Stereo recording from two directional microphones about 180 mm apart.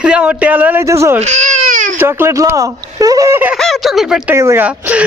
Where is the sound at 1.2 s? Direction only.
40° right (ahead or behind).